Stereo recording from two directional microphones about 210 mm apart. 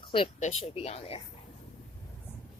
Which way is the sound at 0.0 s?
25° left (ahead or behind).